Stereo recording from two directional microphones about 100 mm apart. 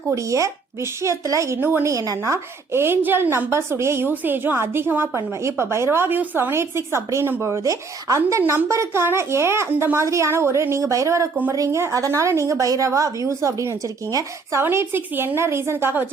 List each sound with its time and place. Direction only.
0.1 s a woman's voice: 30° right (ahead or behind)
14.6 s a woman's voice: 25° right (ahead or behind)